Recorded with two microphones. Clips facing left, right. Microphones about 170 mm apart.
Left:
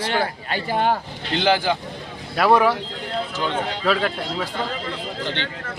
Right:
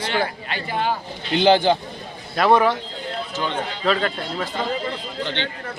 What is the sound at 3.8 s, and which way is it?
Speech, 5° left (ahead or behind).